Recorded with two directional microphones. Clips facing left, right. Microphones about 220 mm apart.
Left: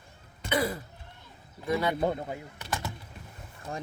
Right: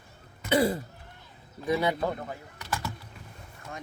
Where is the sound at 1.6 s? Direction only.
15° right (ahead or behind).